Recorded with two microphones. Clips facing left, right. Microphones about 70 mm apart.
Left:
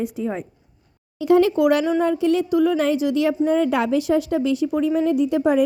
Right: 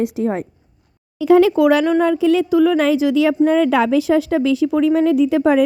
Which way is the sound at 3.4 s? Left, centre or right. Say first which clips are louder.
Right 5 dB; right.